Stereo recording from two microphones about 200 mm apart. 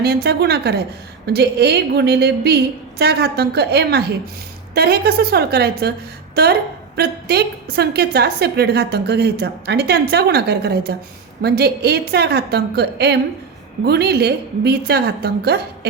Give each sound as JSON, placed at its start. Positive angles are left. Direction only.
{"t": 0.0, "sound": "a woman's voice", "side_deg": -55}